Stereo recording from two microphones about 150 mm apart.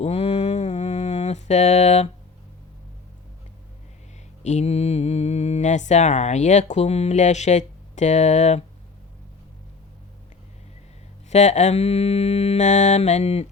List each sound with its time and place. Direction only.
0.0 s mantra: 45° left (ahead or behind)
4.4 s speech: 45° left (ahead or behind)
11.3 s mantra: 50° left (ahead or behind)